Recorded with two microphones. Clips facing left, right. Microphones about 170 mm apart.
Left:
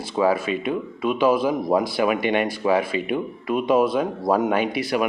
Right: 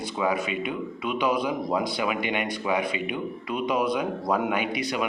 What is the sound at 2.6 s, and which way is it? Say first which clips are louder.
Speech: left 5 dB; 30° left (ahead or behind).